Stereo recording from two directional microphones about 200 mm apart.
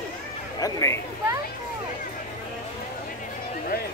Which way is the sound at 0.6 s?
15° left (ahead or behind).